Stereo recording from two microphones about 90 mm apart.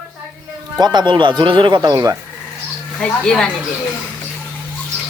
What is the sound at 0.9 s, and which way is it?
Speech, 60° right (ahead or behind).